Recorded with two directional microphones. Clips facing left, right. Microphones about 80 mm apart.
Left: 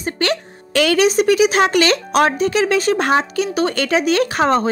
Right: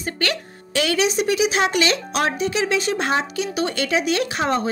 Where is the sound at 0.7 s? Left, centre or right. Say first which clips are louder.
Left 6 dB; left.